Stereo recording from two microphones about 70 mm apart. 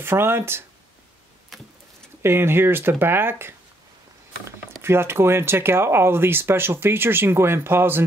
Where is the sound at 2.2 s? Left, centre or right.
Right.